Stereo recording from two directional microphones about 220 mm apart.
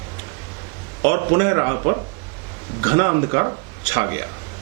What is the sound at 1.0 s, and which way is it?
Speech, 20° right (ahead or behind).